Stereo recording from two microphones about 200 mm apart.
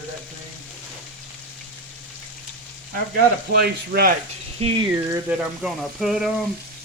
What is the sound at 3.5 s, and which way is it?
Speech, 50° right (ahead or behind).